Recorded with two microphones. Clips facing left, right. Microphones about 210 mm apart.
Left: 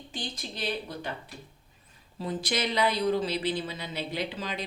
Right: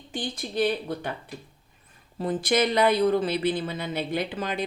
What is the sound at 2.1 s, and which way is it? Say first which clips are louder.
Speech: right 7 dB; 55° right (ahead or behind).